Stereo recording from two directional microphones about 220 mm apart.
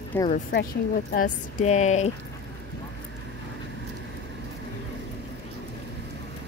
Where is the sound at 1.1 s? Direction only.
35° left (ahead or behind).